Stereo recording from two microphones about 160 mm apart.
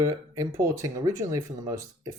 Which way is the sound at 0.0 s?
20° right (ahead or behind).